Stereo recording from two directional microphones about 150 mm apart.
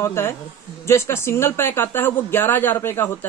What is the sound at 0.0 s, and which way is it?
Speech, 15° left (ahead or behind).